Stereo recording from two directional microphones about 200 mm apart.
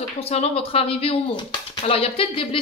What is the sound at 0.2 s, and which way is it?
Speech, 30° left (ahead or behind).